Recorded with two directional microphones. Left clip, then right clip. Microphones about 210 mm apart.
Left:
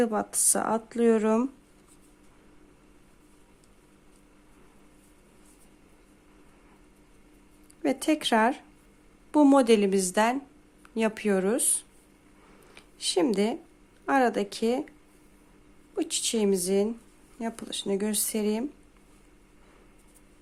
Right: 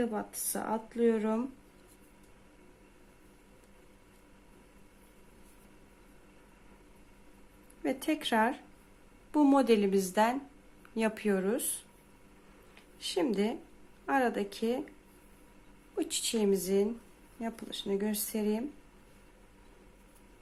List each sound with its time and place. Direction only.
0.0 s speech: 35° left (ahead or behind)
7.8 s speech: 30° left (ahead or behind)
12.7 s speech: 30° left (ahead or behind)
16.0 s speech: 20° left (ahead or behind)